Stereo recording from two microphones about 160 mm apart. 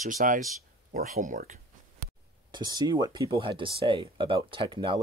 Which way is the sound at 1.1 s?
55° right (ahead or behind).